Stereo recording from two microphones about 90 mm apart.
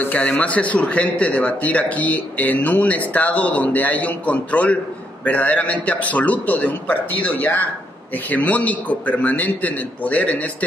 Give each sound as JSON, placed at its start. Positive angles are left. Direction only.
{"t": 0.0, "sound": "speech", "side_deg": 20}